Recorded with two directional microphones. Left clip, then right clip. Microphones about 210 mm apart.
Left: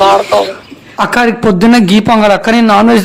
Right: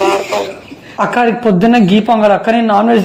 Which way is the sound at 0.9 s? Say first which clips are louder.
Left 2 dB; 20° left (ahead or behind).